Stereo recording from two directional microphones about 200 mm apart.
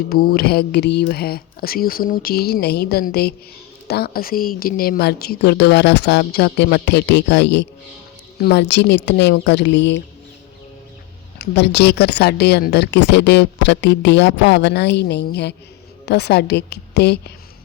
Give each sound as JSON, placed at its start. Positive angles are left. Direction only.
{"t": 0.1, "sound": "speech", "side_deg": 50}
{"t": 11.3, "sound": "speech", "side_deg": 55}